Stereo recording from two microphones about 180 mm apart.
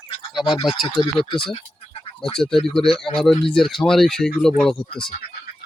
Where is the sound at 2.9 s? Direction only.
Centre (ahead or behind).